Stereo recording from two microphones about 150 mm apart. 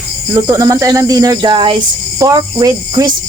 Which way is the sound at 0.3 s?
25° right (ahead or behind).